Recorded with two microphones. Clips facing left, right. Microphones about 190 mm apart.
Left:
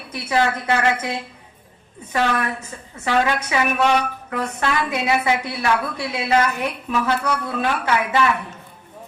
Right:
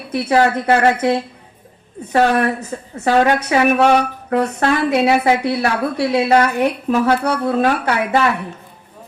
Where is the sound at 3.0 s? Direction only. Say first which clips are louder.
Right 6 dB; 40° right (ahead or behind).